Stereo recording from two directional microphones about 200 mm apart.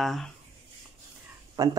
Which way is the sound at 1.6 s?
20° right (ahead or behind).